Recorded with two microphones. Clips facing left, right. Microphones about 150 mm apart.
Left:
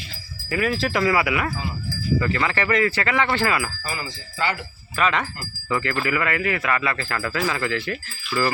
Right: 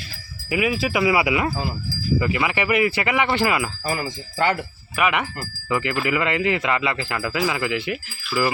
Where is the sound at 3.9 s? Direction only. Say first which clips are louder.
Right 6 dB; 50° right (ahead or behind).